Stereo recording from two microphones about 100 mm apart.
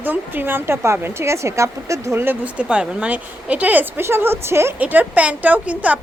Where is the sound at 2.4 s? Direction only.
10° right (ahead or behind).